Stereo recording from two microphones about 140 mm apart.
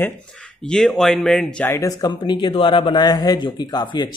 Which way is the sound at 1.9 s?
30° left (ahead or behind).